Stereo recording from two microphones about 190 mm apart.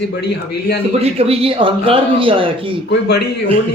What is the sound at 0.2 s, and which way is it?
Speech, 60° left (ahead or behind).